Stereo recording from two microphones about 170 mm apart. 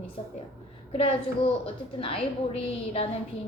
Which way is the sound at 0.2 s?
30° left (ahead or behind).